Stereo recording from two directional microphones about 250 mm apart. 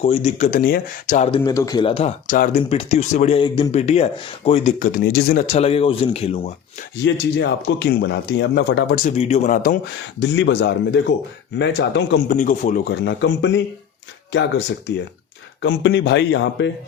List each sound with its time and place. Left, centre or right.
0.0 s speech: left
1.4 s speech: centre
7.0 s speech: left
9.1 s speech: left
10.2 s speech: left